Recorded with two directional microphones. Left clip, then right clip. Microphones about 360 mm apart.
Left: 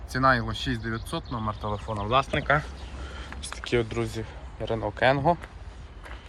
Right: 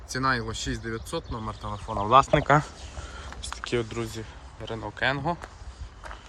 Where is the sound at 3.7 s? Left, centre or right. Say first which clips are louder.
Left 3 dB; centre.